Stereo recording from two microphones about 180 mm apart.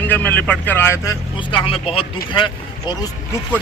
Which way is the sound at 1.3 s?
25° left (ahead or behind).